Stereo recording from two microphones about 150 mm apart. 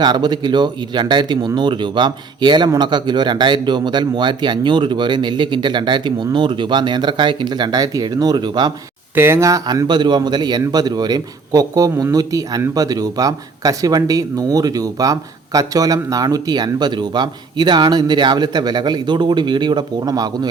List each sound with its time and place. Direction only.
0.0 s a man's voice: 30° right (ahead or behind)
9.1 s a man's voice: 15° right (ahead or behind)